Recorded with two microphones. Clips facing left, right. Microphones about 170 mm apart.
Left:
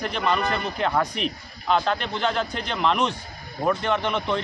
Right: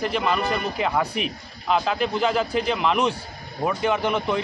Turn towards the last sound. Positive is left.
turn(degrees=-5)  # may be behind; listen again after turning